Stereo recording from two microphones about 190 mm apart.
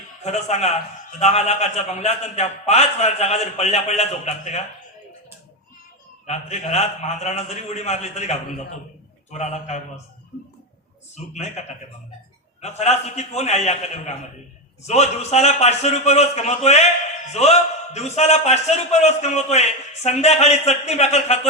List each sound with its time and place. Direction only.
0.3 s a man's voice: 35° left (ahead or behind)
6.2 s a man's voice: 35° left (ahead or behind)
11.1 s a man's voice: 35° left (ahead or behind)
12.6 s a man's voice: 35° left (ahead or behind)